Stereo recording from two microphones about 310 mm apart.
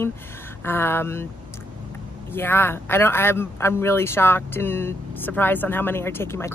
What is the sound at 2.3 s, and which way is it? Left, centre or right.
Speech, centre.